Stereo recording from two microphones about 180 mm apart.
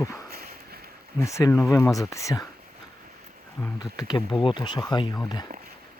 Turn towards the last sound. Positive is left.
turn(degrees=20)  # may be behind; listen again after turning